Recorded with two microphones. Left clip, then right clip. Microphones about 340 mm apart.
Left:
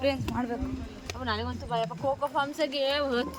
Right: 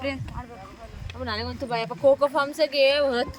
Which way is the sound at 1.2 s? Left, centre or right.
Right.